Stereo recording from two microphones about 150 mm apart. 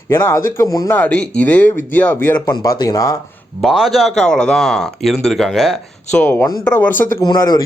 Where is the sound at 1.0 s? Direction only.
10° left (ahead or behind).